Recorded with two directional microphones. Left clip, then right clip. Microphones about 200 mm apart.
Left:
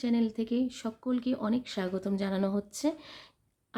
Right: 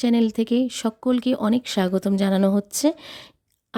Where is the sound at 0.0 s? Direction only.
50° right (ahead or behind).